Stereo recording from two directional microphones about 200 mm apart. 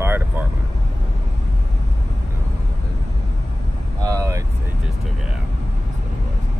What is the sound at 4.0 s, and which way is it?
Vehicle, 15° right (ahead or behind).